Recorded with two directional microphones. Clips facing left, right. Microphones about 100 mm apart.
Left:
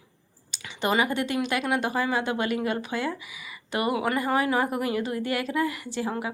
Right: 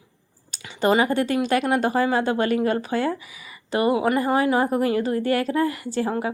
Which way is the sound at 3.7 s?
30° right (ahead or behind).